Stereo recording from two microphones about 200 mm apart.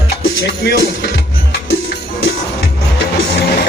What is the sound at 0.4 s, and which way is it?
Speech, 60° left (ahead or behind).